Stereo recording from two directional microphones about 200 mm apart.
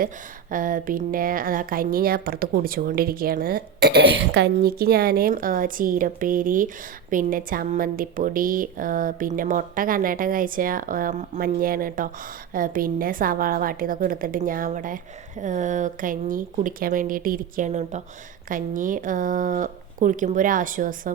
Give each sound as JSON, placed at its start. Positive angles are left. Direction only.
{"t": 0.5, "sound": "speech", "side_deg": -45}